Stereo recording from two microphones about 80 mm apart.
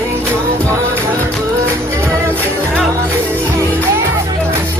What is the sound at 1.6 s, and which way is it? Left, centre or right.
Music, right.